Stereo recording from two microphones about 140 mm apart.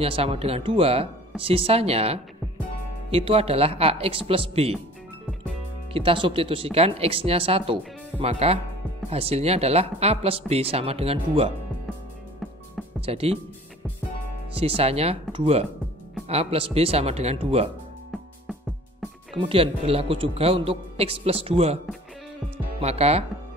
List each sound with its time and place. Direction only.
0.0 s speech: 45° right (ahead or behind)
5.9 s speech: 40° right (ahead or behind)
13.0 s speech: 45° right (ahead or behind)
14.5 s speech: 45° right (ahead or behind)
19.3 s speech: 40° right (ahead or behind)
22.8 s speech: 50° right (ahead or behind)